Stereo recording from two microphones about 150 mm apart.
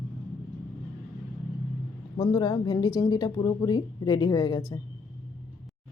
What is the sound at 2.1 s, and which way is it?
Speech, 30° left (ahead or behind).